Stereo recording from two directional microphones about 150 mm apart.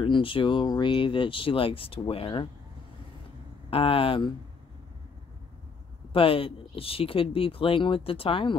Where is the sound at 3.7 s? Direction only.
35° left (ahead or behind).